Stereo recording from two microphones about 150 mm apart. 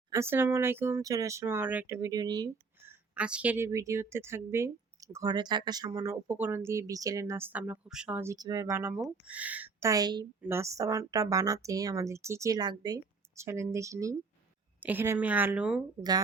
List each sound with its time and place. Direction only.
0.1 s a woman's voice: 15° right (ahead or behind)
2.8 s a woman's voice: 10° right (ahead or behind)
9.9 s a woman's voice: 25° right (ahead or behind); by 15.8 s 5° right (ahead or behind)